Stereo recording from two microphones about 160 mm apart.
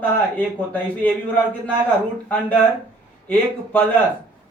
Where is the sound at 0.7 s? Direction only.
10° left (ahead or behind).